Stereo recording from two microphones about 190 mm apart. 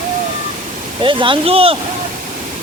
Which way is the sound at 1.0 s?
25° right (ahead or behind).